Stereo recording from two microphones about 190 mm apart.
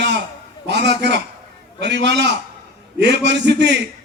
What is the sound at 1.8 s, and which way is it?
A man's voice, 65° right (ahead or behind).